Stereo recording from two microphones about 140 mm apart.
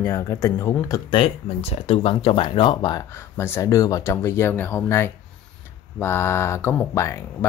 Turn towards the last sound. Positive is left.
turn(degrees=20)  # may be behind; listen again after turning